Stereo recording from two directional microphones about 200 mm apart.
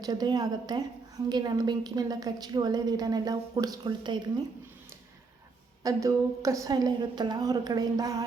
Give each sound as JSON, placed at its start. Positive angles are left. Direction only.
{"t": 0.0, "sound": "a woman's voice", "side_deg": -20}
{"t": 5.8, "sound": "a woman's voice", "side_deg": -15}